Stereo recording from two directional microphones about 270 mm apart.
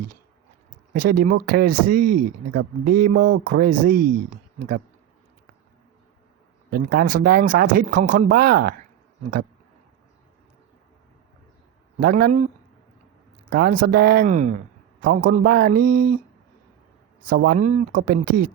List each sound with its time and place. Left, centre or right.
0.7 s speech: right
6.7 s speech: right
11.9 s speech: right
13.5 s speech: right
17.2 s speech: right